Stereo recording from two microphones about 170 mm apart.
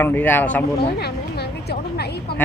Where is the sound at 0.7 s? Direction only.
70° left (ahead or behind).